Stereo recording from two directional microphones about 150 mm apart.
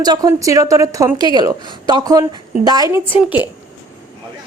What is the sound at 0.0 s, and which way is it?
A woman's voice, 25° right (ahead or behind).